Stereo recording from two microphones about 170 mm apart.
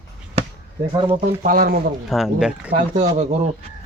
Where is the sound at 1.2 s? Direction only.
55° right (ahead or behind).